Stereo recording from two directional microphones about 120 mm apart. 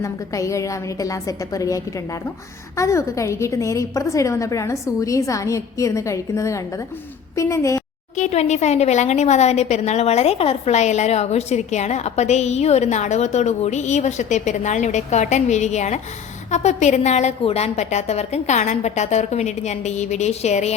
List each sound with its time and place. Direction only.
0.0 s a woman's voice: 25° left (ahead or behind)
8.1 s a woman's voice: 70° left (ahead or behind)